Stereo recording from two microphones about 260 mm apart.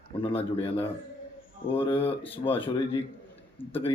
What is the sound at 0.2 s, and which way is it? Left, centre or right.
Speech, centre.